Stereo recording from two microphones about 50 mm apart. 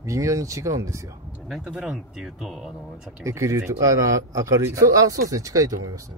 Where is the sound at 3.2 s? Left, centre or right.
Right.